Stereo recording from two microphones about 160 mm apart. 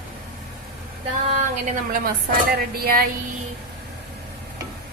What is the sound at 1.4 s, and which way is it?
Speech, 45° right (ahead or behind).